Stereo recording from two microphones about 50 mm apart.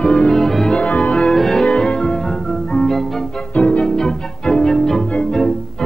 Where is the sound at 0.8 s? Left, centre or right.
Left.